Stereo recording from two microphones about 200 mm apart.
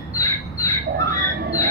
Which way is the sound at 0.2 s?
15° left (ahead or behind).